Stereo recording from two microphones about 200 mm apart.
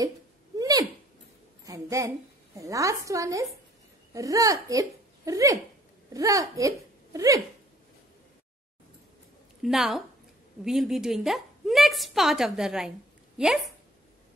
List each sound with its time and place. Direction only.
0.6 s a sound: 20° right (ahead or behind)
1.6 s a woman's voice: 15° right (ahead or behind)
9.6 s a woman's voice: centre (ahead or behind)